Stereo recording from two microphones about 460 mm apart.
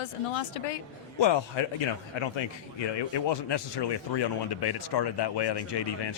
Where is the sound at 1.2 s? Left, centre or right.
Left.